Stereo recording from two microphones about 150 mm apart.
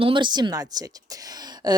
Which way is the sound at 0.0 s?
30° right (ahead or behind).